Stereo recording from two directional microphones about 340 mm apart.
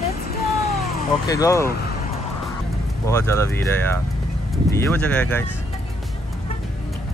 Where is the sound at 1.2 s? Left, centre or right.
Centre.